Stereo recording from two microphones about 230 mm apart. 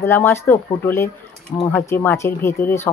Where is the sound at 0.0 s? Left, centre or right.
Centre.